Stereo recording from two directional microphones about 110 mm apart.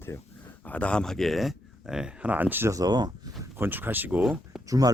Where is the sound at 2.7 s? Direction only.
35° right (ahead or behind).